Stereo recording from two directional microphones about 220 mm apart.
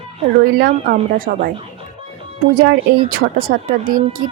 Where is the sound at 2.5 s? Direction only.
40° right (ahead or behind).